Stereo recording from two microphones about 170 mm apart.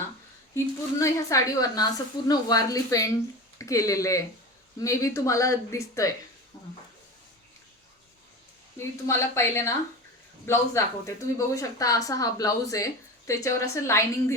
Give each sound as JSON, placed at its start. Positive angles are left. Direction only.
{"t": 0.5, "sound": "a woman's voice", "side_deg": 20}
{"t": 8.8, "sound": "a woman's voice", "side_deg": 15}